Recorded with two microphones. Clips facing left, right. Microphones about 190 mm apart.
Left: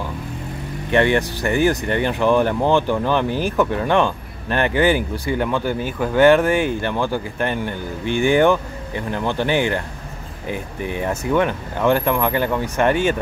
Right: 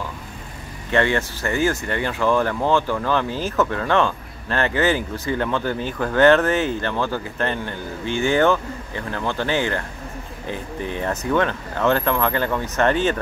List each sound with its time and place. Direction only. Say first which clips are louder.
0.9 s speech: left 3 dB; 15° left (ahead or behind)